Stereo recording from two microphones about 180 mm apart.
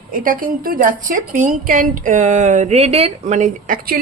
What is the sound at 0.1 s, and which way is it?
A woman's voice, 50° right (ahead or behind).